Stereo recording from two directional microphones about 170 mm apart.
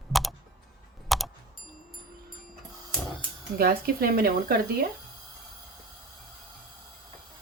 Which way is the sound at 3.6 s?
60° right (ahead or behind).